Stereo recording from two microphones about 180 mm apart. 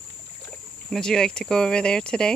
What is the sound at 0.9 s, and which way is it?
Speech, 5° left (ahead or behind).